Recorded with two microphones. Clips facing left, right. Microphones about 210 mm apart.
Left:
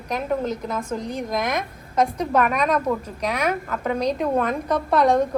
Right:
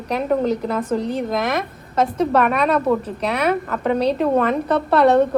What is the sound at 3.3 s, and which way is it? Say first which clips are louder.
Speech: right 5 dB; 10° left (ahead or behind).